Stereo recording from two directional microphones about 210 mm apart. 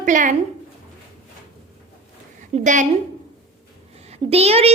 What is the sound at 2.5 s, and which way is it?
Speech, 30° right (ahead or behind).